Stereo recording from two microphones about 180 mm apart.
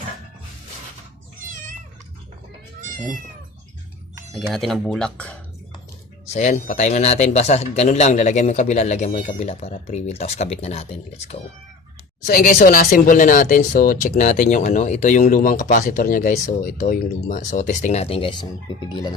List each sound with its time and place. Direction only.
4.3 s speech: centre (ahead or behind)
6.3 s speech: 40° left (ahead or behind)
12.2 s speech: 50° left (ahead or behind); by 18.4 s 30° left (ahead or behind)